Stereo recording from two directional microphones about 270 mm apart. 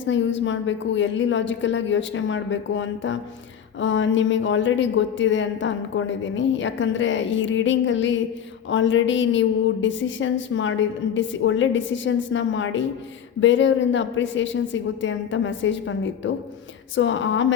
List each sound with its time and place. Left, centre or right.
0.0 s a woman's voice: left